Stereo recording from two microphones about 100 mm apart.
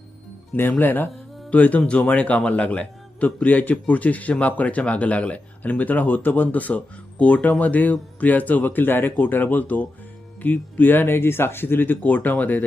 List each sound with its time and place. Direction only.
0.5 s speech: 20° left (ahead or behind)